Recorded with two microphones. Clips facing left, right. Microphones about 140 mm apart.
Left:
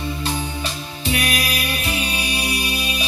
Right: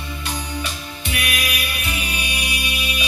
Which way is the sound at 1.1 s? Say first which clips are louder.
Left 1 dB; 30° left (ahead or behind).